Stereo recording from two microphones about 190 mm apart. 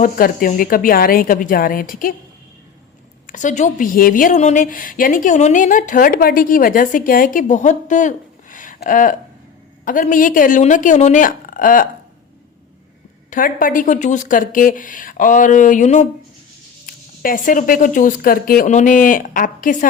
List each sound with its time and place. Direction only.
0.0 s speech: 45° left (ahead or behind)
3.2 s speech: 40° left (ahead or behind)
13.3 s speech: 45° left (ahead or behind)